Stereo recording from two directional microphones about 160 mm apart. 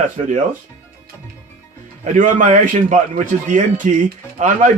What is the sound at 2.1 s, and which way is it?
A man's voice, 50° right (ahead or behind).